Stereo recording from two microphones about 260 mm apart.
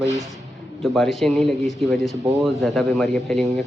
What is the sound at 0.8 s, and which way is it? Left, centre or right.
Speech, centre.